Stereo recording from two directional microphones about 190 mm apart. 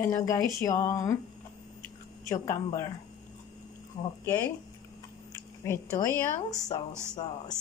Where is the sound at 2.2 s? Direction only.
15° left (ahead or behind).